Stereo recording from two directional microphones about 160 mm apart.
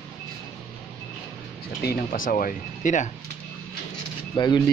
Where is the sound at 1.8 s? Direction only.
60° left (ahead or behind).